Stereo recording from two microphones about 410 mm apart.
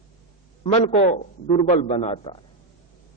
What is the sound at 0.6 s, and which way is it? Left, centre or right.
A man's voice, centre.